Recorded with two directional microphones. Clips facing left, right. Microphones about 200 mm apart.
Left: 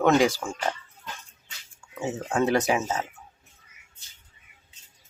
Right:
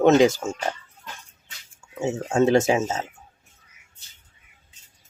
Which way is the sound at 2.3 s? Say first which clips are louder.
Right 5 dB; 25° right (ahead or behind).